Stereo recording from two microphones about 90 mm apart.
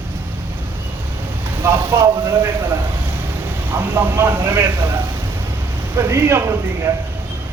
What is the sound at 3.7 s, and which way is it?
A man's voice, 20° right (ahead or behind).